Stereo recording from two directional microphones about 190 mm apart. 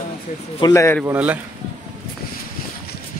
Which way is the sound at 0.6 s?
20° left (ahead or behind).